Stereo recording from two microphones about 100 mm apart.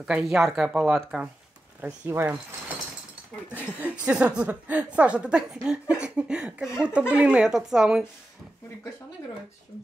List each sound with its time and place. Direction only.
0.0 s speech: 5° right (ahead or behind)
2.0 s speech: 25° right (ahead or behind)
3.8 s a woman's voice: 15° right (ahead or behind)